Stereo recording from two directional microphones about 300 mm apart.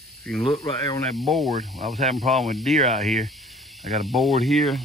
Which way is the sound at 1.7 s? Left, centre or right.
Right.